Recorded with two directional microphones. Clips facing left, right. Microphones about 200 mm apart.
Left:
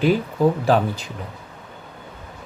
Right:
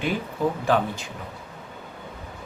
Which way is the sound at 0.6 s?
35° left (ahead or behind).